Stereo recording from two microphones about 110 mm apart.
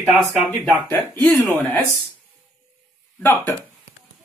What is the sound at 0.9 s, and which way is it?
Speech, 15° left (ahead or behind).